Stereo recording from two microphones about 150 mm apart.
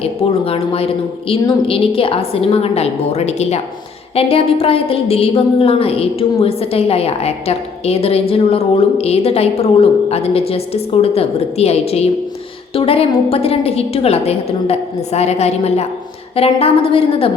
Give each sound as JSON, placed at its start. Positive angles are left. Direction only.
{"t": 0.0, "sound": "a woman's voice", "side_deg": 40}